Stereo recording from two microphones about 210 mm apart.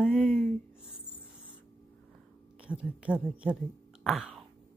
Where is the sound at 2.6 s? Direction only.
5° right (ahead or behind).